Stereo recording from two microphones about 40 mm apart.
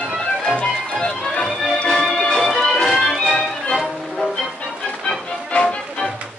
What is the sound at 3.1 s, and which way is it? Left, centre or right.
Music, centre.